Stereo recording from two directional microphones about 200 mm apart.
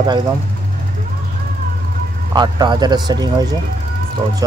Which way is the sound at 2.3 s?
20° right (ahead or behind).